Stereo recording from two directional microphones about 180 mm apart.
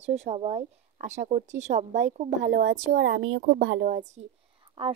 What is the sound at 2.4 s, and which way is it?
A woman's voice, 85° right.